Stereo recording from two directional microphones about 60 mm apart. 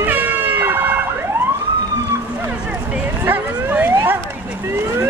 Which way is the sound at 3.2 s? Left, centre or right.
Right.